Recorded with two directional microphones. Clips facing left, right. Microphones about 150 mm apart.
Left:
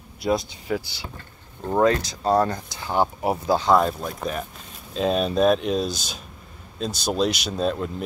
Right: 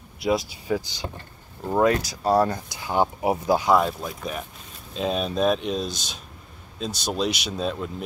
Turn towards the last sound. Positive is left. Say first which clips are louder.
# left 3 dB
turn(degrees=0)  # may be behind; listen again after turning